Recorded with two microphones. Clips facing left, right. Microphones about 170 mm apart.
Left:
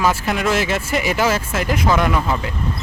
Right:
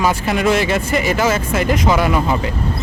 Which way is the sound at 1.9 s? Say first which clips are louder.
Right 2 dB; 5° right (ahead or behind).